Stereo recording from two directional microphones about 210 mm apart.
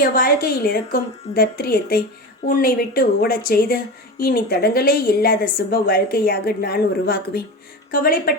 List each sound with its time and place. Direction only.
0.0 s a woman's voice: 45° left (ahead or behind)